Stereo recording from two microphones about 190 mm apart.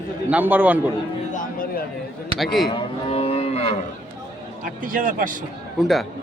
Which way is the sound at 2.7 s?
30° left (ahead or behind).